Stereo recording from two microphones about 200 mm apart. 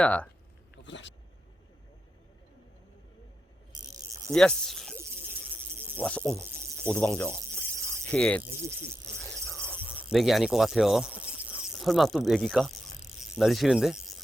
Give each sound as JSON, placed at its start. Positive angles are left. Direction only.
{"t": 0.0, "sound": "speech", "side_deg": 5}
{"t": 0.8, "sound": "speech", "side_deg": 65}
{"t": 3.7, "sound": "cricket", "side_deg": -20}
{"t": 4.3, "sound": "speech", "side_deg": 5}
{"t": 6.0, "sound": "speech", "side_deg": 5}
{"t": 9.8, "sound": "speech", "side_deg": -5}